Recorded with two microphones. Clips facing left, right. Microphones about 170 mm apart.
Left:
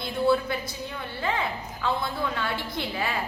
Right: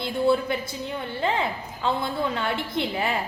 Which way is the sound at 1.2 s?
30° right (ahead or behind).